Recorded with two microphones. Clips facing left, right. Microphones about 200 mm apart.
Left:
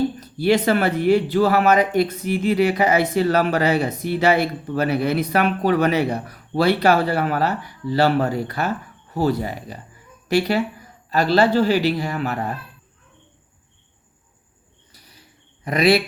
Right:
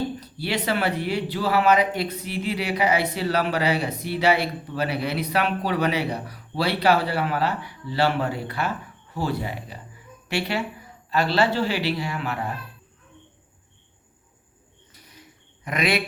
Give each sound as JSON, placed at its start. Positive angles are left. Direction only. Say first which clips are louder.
{"t": 0.2, "sound": "a woman's voice", "louder": "left 10 dB", "side_deg": 45}
{"t": 15.6, "sound": "a woman's voice", "louder": "left 8 dB", "side_deg": 35}